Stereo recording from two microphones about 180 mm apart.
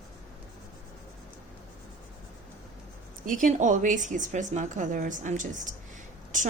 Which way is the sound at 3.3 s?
45° right (ahead or behind).